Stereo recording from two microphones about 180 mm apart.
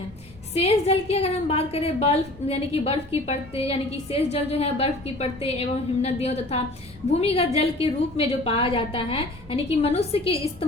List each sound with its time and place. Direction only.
0.6 s a woman's voice: 35° left (ahead or behind)